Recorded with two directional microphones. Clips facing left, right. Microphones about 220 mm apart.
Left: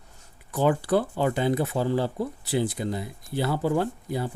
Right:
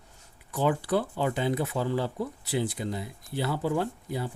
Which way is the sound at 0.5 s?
45° left (ahead or behind).